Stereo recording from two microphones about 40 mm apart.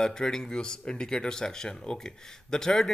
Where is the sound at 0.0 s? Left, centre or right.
Centre.